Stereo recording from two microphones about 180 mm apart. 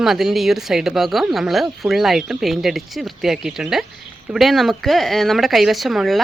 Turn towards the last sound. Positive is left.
turn(degrees=0)  # may be behind; listen again after turning